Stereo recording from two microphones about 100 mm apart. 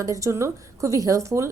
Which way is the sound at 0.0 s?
35° right (ahead or behind).